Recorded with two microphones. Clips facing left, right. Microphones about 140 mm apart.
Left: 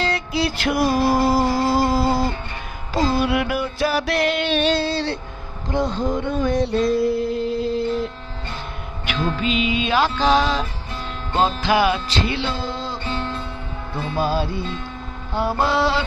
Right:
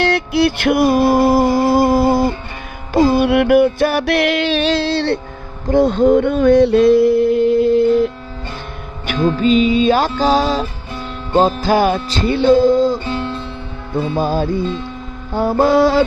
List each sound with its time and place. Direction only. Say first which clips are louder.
0.0 s music: right 8 dB; 70° right (ahead or behind)
9.0 s music: right 9 dB; 45° right (ahead or behind)
14.3 s music: right 6 dB; 50° right (ahead or behind)